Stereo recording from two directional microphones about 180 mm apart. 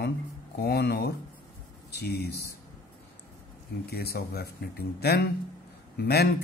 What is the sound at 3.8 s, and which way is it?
Speech, 60° left (ahead or behind).